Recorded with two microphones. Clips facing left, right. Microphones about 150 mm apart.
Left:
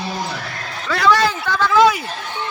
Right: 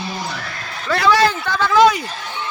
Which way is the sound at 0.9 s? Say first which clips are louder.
Right 1 dB; centre (ahead or behind).